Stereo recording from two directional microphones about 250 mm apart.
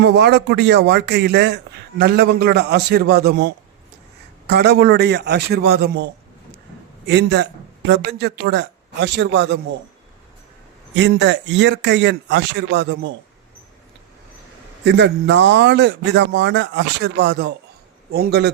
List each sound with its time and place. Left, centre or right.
0.0 s a man's voice: right
7.1 s speech: right
10.9 s speech: right
14.8 s a man's voice: right